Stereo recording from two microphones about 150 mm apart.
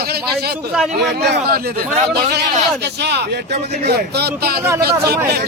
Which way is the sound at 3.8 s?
90° right.